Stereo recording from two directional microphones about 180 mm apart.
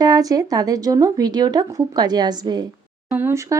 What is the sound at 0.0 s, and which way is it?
Speech, 20° right (ahead or behind).